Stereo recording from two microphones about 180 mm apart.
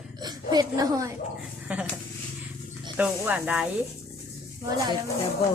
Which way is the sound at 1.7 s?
5° right (ahead or behind).